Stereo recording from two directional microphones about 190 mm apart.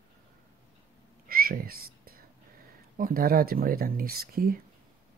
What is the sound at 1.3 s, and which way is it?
Whispering, 50° right (ahead or behind).